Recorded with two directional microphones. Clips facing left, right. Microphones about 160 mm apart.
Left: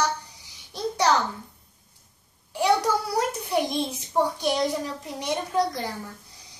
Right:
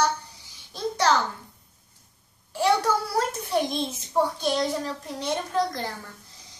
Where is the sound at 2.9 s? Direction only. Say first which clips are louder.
Even; 15° left (ahead or behind).